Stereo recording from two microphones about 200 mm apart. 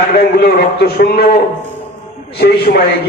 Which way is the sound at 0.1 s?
50° left (ahead or behind).